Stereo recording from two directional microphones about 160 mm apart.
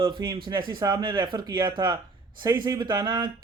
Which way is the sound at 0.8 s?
25° right (ahead or behind).